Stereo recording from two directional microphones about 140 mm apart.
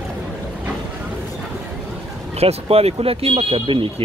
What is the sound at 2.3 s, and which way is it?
Speech, 45° right (ahead or behind).